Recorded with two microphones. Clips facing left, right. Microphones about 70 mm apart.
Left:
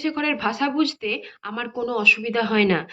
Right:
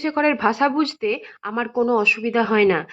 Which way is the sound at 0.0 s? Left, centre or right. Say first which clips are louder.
Right 5 dB; right.